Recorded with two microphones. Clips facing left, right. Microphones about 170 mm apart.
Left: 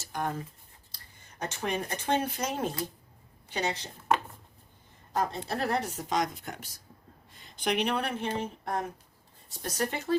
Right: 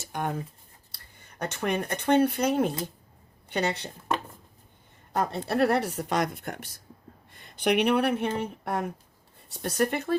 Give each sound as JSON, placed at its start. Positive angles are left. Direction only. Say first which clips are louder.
{"t": 0.0, "sound": "a sound", "louder": "right 2 dB", "side_deg": -60}
{"t": 0.9, "sound": "a woman's voice", "louder": "right 2 dB", "side_deg": -60}
{"t": 5.1, "sound": "a woman's voice", "louder": "right 4 dB", "side_deg": -65}